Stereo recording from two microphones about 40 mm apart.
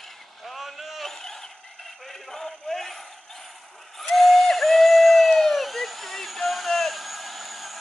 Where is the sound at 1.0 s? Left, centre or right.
Centre.